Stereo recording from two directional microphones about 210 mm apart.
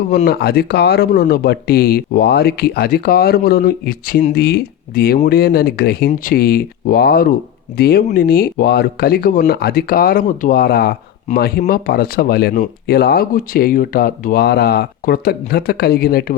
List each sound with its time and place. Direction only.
0.1 s speech: 45° left (ahead or behind)